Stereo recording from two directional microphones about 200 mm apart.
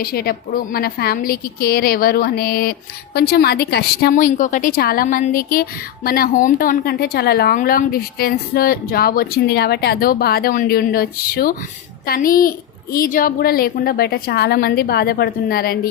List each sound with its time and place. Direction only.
0.0 s a woman's voice: 50° left (ahead or behind)